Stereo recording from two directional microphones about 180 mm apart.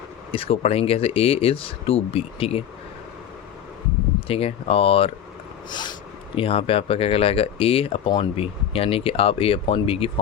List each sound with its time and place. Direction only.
0.3 s speech: 30° left (ahead or behind)
4.3 s speech: 30° left (ahead or behind)